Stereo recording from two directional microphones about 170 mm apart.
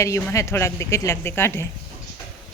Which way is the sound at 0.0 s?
15° left (ahead or behind).